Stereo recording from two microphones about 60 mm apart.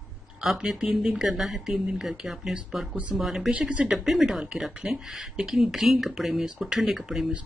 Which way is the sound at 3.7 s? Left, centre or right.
Right.